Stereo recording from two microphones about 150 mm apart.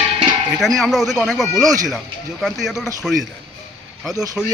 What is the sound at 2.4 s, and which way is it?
Speech, centre (ahead or behind).